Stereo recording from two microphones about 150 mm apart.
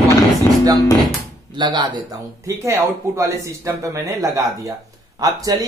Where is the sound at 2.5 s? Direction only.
20° right (ahead or behind).